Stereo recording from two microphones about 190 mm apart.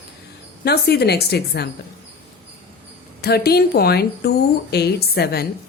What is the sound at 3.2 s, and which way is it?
A woman's voice, 55° left (ahead or behind).